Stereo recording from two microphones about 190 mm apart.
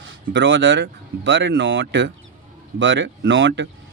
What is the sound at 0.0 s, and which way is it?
Speech, 80° right.